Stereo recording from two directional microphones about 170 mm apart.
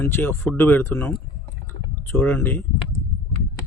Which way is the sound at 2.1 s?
15° left (ahead or behind).